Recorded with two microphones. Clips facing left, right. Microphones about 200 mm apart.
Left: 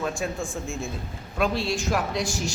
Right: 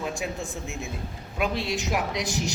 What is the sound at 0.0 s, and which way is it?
A man's voice, 20° right (ahead or behind).